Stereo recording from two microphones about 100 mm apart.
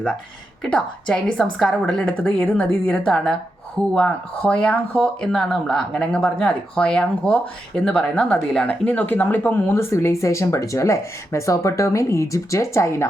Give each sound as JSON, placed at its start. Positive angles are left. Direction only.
{"t": 0.6, "sound": "speech", "side_deg": 10}